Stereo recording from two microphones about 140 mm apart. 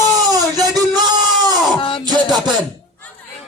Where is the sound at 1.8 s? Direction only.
40° left (ahead or behind).